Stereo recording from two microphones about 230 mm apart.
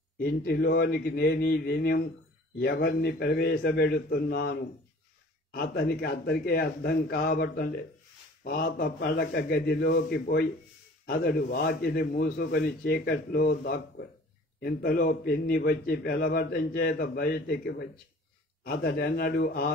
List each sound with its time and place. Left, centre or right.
0.2 s a man's voice: left